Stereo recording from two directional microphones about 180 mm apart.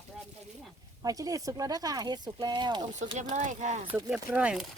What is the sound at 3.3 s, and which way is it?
Speech, 40° right (ahead or behind).